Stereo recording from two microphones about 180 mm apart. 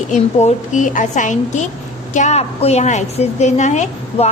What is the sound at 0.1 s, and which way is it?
A woman's voice, 40° left (ahead or behind).